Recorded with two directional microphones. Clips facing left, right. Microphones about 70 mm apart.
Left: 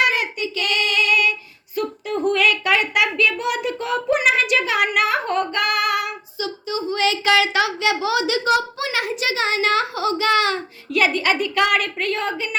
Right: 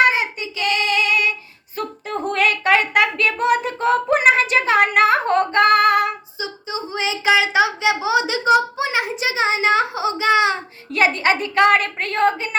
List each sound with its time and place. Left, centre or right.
0.0 s child singing: right
1.7 s a sound: right
6.4 s speech: right
10.9 s a woman's voice: right